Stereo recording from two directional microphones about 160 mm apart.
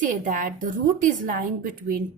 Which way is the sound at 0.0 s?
55° right (ahead or behind).